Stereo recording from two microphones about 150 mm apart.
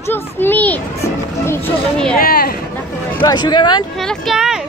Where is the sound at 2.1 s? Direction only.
85° left.